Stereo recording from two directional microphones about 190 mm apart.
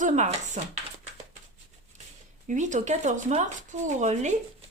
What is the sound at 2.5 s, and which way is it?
Speech, 40° right (ahead or behind).